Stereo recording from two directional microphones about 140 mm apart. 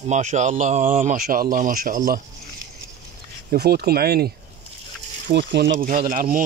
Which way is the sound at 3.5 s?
90° right.